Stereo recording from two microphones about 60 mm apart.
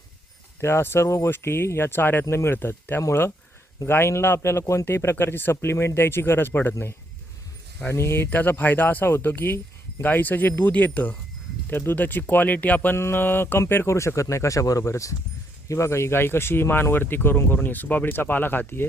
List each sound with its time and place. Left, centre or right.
0.6 s speech: left
7.9 s speech: left
8.4 s speech: left
13.0 s speech: left
15.7 s speech: left
18.8 s speech: left